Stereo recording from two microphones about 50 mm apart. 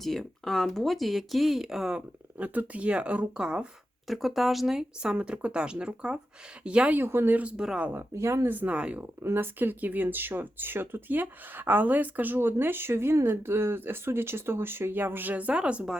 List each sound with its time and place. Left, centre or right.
0.0 s speech: centre
2.0 s speech: right
4.0 s speech: centre
5.1 s speech: right
6.9 s speech: right
7.3 s speech: right
8.1 s speech: right
8.4 s speech: right
8.7 s speech: right
9.2 s speech: right